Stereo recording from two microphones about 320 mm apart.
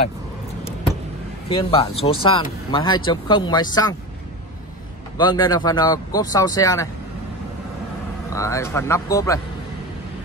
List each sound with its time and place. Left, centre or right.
1.5 s speech: centre
5.1 s speech: centre
8.3 s speech: centre